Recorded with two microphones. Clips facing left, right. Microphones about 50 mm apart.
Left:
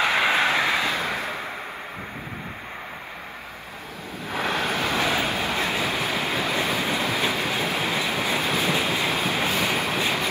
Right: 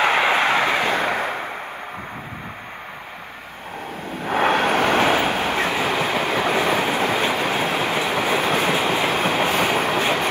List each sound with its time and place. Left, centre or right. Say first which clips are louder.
0.0 s vehicle: right 3 dB; right
4.1 s vehicle: right 8 dB; right